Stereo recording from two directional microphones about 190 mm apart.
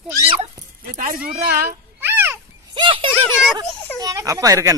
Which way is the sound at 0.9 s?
45° right (ahead or behind).